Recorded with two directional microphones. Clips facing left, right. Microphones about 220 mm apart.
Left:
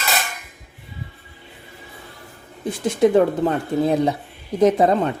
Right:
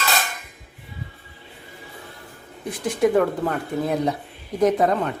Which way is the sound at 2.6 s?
25° left (ahead or behind).